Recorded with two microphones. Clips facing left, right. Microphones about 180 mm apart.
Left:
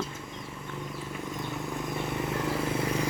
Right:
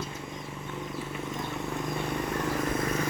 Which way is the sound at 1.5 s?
Centre (ahead or behind).